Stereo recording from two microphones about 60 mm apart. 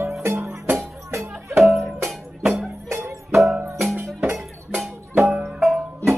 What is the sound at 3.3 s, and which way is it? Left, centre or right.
Music, right.